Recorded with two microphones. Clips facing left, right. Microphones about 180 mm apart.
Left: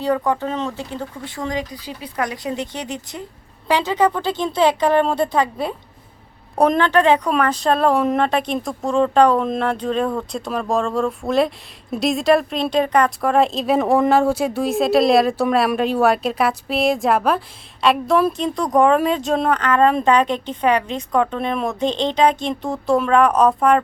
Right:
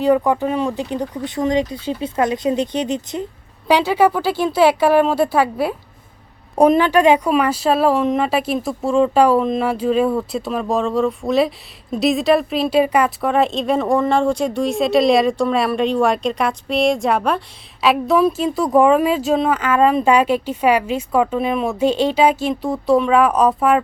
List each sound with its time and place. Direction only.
0.0 s a woman's voice: 15° right (ahead or behind)